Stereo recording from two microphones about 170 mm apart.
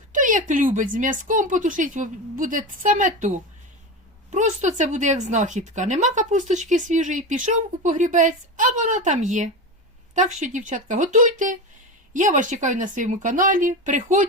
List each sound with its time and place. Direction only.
0.1 s a woman's voice: 50° right (ahead or behind)